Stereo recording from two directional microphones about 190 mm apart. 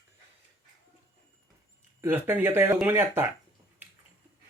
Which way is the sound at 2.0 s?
10° right (ahead or behind).